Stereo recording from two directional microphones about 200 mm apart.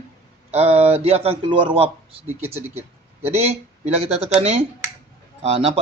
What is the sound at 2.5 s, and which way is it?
Speech, 10° right (ahead or behind).